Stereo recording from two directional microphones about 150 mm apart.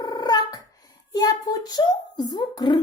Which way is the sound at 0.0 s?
25° left (ahead or behind).